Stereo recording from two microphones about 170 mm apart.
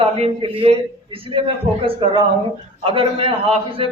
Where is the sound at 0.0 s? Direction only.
30° right (ahead or behind).